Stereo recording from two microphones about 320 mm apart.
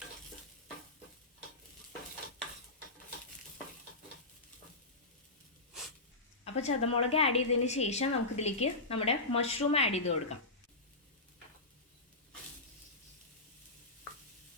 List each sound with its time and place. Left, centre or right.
6.4 s a woman's voice: centre